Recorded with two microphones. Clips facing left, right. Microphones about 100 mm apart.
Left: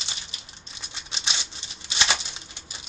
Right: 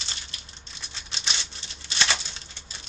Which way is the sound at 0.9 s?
15° left (ahead or behind).